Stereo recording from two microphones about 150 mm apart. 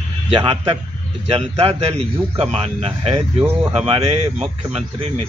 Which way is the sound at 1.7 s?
45° right (ahead or behind).